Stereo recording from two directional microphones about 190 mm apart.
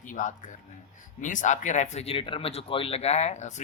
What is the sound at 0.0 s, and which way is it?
A man's voice, 40° left (ahead or behind).